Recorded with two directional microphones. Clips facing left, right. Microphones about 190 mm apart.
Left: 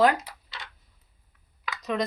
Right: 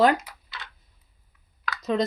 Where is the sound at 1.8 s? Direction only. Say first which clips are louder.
Right 4 dB; 25° right (ahead or behind).